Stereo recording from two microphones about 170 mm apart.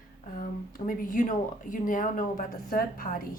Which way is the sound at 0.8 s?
55° left (ahead or behind).